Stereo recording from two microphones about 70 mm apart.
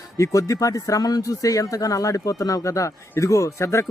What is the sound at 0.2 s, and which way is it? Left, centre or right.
A man's voice, left.